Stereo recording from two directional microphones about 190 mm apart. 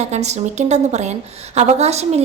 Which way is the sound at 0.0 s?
35° right (ahead or behind).